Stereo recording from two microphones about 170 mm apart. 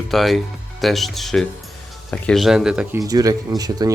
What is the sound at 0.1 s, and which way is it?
Speech, centre (ahead or behind).